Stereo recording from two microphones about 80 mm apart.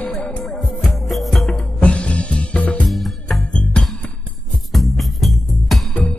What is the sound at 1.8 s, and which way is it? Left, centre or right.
Music, centre.